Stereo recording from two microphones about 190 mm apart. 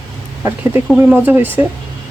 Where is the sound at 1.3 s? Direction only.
10° right (ahead or behind).